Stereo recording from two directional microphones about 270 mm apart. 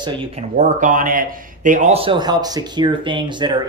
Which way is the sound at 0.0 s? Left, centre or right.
Centre.